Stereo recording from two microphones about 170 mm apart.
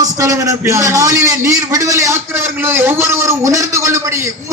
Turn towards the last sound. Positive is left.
turn(degrees=-20)  # may be behind; listen again after turning